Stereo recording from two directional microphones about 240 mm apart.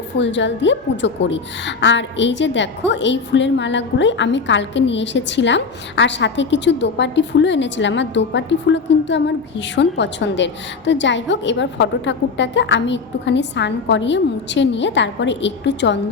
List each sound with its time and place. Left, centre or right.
0.2 s a woman's voice: left